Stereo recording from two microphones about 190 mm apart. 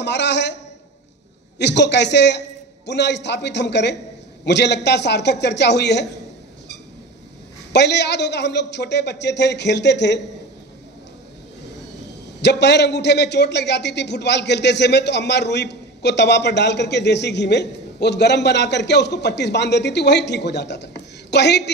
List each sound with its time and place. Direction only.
0.0 s a man's voice: 65° left (ahead or behind)
1.6 s a man's voice: 65° left (ahead or behind)
7.7 s a man's voice: 65° left (ahead or behind)
12.4 s a man's voice: 65° left (ahead or behind)